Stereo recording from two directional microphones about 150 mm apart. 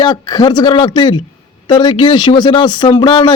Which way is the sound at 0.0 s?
30° left (ahead or behind).